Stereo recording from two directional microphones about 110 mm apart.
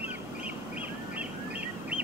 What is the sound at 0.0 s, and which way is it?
Bird vocalization, 15° right (ahead or behind).